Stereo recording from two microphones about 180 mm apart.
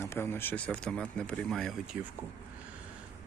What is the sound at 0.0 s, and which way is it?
A man's voice, 15° left (ahead or behind).